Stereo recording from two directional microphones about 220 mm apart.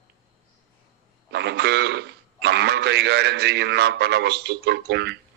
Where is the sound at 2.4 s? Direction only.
50° right (ahead or behind).